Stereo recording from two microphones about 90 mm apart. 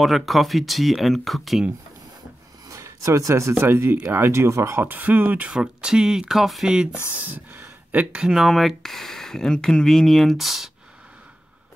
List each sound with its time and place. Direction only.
0.0 s speech: centre (ahead or behind)
2.7 s speech: 35° right (ahead or behind); by 7.0 s 10° right (ahead or behind)
7.2 s speech: 20° right (ahead or behind)
8.2 s speech: 5° right (ahead or behind)